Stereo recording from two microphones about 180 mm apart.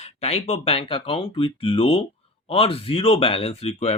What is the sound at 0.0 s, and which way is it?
Speech, 35° left (ahead or behind).